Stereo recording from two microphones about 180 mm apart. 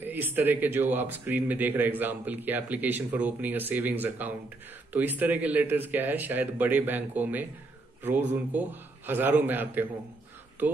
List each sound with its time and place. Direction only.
0.0 s speech: 10° right (ahead or behind)